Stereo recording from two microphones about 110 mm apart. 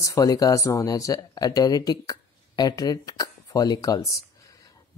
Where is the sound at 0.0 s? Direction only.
30° left (ahead or behind).